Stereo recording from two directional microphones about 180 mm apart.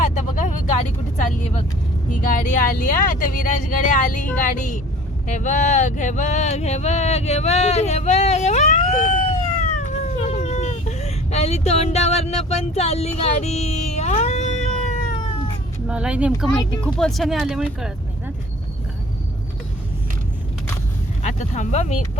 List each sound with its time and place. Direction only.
0.0 s vehicle: 45° left (ahead or behind)
2.0 s speech: 45° left (ahead or behind)
10.2 s vehicle: 40° left (ahead or behind)
15.9 s speech: 5° right (ahead or behind)
16.8 s speech: 5° left (ahead or behind)
21.2 s speech: 40° left (ahead or behind)